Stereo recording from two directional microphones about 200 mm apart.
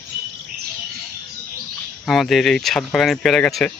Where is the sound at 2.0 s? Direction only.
Centre (ahead or behind).